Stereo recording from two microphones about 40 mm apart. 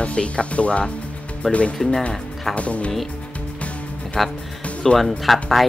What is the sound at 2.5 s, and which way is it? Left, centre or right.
Speech, left.